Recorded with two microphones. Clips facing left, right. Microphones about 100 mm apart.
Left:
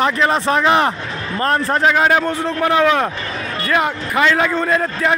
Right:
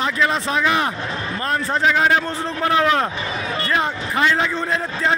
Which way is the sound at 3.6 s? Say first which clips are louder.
Left 5 dB; 75° left (ahead or behind).